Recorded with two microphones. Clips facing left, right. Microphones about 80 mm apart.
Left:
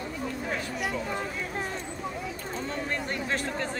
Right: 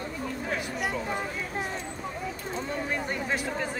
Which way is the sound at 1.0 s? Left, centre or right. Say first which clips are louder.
Even; centre.